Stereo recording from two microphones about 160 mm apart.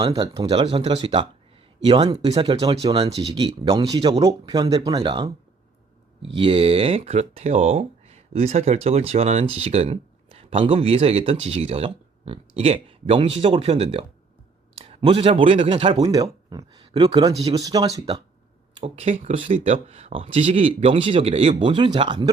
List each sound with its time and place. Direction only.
0.1 s speech: 25° right (ahead or behind)
18.8 s speech: 45° right (ahead or behind)